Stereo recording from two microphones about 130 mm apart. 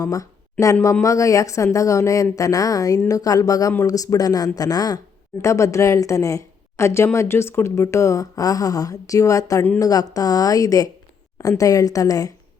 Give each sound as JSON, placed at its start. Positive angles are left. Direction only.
{"t": 0.0, "sound": "a woman's voice", "side_deg": 25}